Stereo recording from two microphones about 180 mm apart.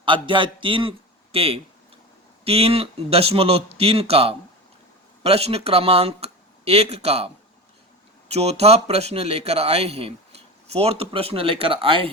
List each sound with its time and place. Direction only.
0.0 s a man's voice: 25° right (ahead or behind)
8.3 s speech: 35° right (ahead or behind)